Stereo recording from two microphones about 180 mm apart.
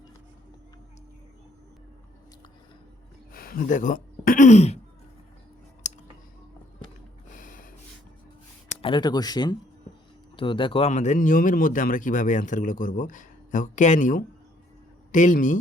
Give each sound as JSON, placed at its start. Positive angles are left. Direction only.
{"t": 3.3, "sound": "speech", "side_deg": 55}
{"t": 5.8, "sound": "a sound", "side_deg": 40}
{"t": 7.3, "sound": "snort", "side_deg": 45}
{"t": 8.8, "sound": "speech", "side_deg": 25}